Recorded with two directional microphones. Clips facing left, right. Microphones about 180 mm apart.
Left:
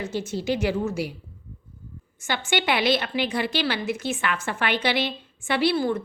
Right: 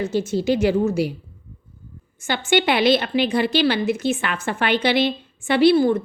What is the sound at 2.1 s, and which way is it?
A woman's voice, 25° right (ahead or behind).